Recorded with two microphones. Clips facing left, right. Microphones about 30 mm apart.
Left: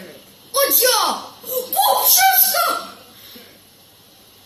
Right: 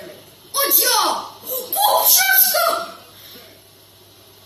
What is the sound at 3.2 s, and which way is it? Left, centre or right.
Stir, centre.